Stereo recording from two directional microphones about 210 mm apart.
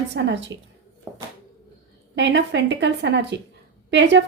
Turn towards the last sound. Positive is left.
turn(degrees=-55)  # may be behind; listen again after turning